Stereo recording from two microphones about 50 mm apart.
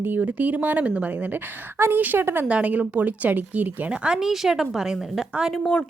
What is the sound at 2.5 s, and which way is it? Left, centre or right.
A woman's voice, right.